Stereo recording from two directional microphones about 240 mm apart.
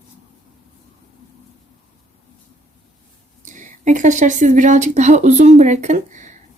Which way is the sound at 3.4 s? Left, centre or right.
Right.